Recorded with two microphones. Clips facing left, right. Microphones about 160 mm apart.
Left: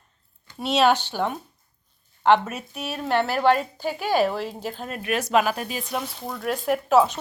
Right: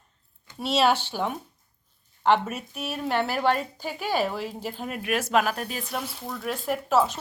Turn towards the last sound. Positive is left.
turn(degrees=0)  # may be behind; listen again after turning